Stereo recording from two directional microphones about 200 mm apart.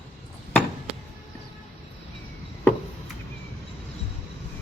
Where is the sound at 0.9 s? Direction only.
30° right (ahead or behind).